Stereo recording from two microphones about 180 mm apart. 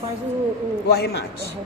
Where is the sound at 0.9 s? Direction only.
60° left (ahead or behind).